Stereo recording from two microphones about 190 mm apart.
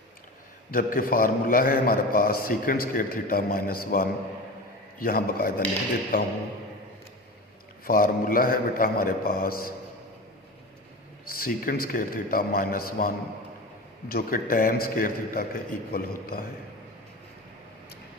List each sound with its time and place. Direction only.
0.7 s a man's voice: 50° left (ahead or behind)
7.9 s a man's voice: 50° left (ahead or behind)
11.3 s a man's voice: 50° left (ahead or behind)